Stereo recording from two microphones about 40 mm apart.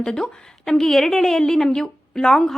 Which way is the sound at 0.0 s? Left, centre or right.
Left.